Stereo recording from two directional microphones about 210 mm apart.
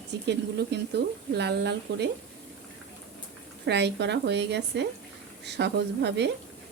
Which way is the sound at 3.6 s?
55° right (ahead or behind).